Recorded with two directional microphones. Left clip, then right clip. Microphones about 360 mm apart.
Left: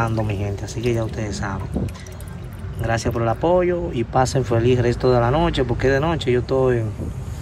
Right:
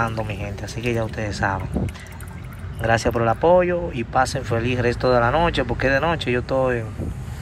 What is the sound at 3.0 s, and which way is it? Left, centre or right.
Speech, centre.